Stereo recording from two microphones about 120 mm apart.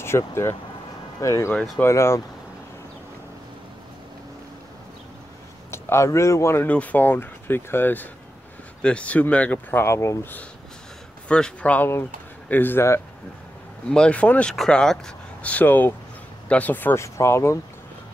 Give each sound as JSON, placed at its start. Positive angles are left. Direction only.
{"t": 0.0, "sound": "speech", "side_deg": 20}
{"t": 5.7, "sound": "speech", "side_deg": 25}
{"t": 11.2, "sound": "speech", "side_deg": 10}
{"t": 13.8, "sound": "speech", "side_deg": 5}